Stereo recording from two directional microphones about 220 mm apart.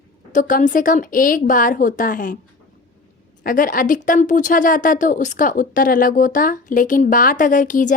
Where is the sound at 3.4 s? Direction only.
40° left (ahead or behind).